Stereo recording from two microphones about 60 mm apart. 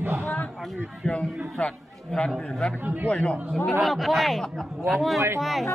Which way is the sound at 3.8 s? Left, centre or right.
Centre.